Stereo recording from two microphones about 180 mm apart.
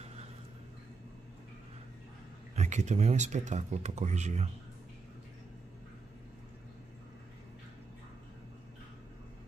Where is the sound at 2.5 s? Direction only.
40° right (ahead or behind).